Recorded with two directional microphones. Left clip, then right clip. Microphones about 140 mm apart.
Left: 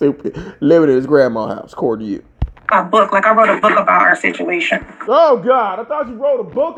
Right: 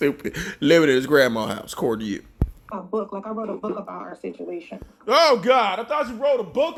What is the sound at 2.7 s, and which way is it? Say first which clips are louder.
Speech: left 17 dB; 30° left (ahead or behind).